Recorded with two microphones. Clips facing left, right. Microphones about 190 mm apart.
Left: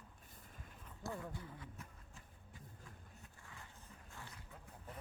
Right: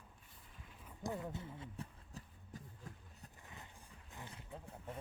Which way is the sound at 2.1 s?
40° right (ahead or behind).